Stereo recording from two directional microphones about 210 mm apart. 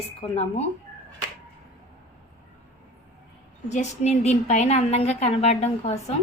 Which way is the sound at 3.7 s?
35° left (ahead or behind).